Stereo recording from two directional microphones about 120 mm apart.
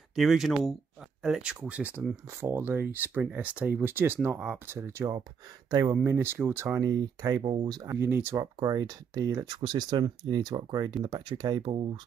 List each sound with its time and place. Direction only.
0.1 s speech: centre (ahead or behind); by 5.2 s 20° right (ahead or behind)
5.7 s speech: 30° right (ahead or behind)
6.0 s speech: 20° right (ahead or behind)
7.9 s speech: 20° right (ahead or behind)
8.5 s speech: 30° right (ahead or behind)
9.6 s speech: 40° right (ahead or behind)